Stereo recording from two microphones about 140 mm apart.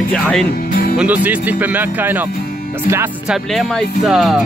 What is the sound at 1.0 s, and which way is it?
Speech, 10° right (ahead or behind).